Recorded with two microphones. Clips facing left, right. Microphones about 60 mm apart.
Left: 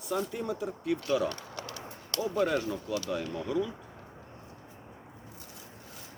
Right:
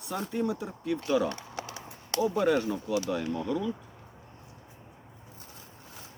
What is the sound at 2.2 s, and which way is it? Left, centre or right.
Speech, centre.